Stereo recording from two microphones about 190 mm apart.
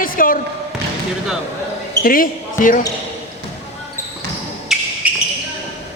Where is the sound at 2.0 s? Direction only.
50° left (ahead or behind).